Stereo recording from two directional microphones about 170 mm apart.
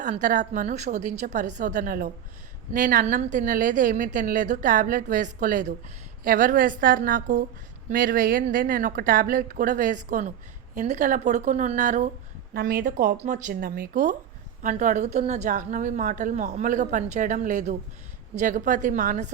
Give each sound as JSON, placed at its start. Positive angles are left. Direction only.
{"t": 0.0, "sound": "a woman's voice", "side_deg": -45}
{"t": 12.5, "sound": "a woman's voice", "side_deg": -55}